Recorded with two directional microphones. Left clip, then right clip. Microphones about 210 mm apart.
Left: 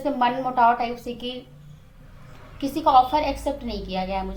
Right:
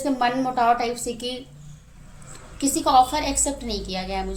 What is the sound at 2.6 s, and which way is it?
A woman's voice, 35° right (ahead or behind).